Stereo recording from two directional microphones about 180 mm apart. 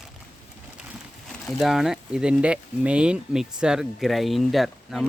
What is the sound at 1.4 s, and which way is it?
Speech, centre (ahead or behind).